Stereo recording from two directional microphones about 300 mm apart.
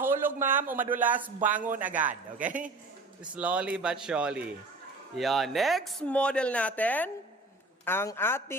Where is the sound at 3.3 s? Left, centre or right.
Centre.